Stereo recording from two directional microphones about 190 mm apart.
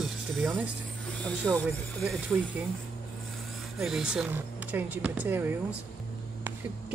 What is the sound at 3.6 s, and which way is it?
Speech, centre (ahead or behind).